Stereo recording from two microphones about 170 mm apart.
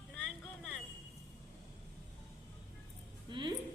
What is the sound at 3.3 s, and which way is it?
Music, 25° right (ahead or behind).